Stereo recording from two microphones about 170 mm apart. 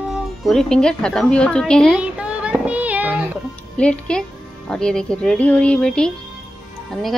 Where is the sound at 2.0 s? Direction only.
5° right (ahead or behind).